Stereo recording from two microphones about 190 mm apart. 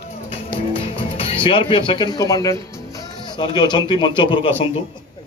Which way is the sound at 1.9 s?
20° left (ahead or behind).